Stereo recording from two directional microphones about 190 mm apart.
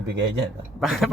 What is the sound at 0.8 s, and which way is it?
Speech, centre (ahead or behind).